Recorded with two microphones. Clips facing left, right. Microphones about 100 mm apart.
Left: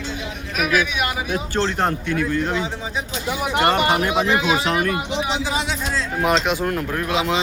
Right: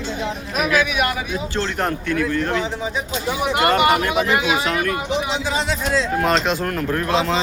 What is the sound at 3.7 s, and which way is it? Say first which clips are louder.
Speech: right 2 dB; 25° left (ahead or behind).